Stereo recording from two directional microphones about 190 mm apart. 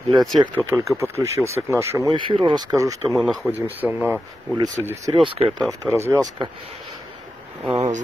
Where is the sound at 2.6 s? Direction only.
15° right (ahead or behind).